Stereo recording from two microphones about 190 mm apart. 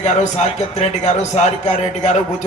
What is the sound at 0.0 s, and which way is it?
A man's voice, 40° left (ahead or behind).